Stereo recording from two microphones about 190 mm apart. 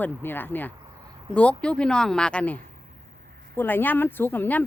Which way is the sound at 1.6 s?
5° left (ahead or behind).